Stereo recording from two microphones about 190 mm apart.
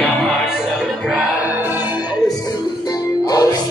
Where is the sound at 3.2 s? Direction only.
20° left (ahead or behind).